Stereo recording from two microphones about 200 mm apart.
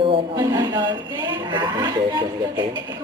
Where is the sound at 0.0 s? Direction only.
25° right (ahead or behind).